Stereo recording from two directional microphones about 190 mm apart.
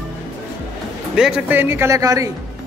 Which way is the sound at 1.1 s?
5° right (ahead or behind).